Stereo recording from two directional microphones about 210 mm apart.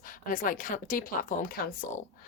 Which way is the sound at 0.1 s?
40° left (ahead or behind).